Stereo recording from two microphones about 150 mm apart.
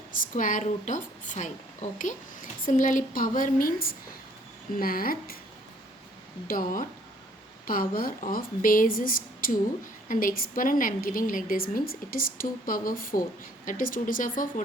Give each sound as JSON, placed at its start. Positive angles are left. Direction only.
{"t": 0.1, "sound": "a woman's voice", "side_deg": 65}
{"t": 7.7, "sound": "a woman's voice", "side_deg": 70}